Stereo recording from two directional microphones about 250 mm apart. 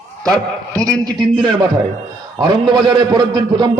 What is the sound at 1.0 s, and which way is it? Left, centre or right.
A man's voice, centre.